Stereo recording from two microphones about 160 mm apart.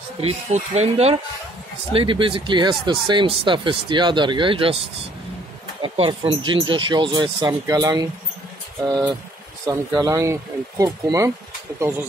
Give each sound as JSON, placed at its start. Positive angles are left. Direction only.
{"t": 0.2, "sound": "speech", "side_deg": -40}
{"t": 5.8, "sound": "speech", "side_deg": -35}